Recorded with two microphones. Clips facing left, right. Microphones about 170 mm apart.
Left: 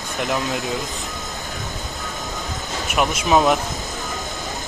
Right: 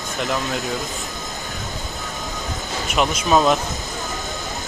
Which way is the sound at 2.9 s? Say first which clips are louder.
Even; 10° left (ahead or behind).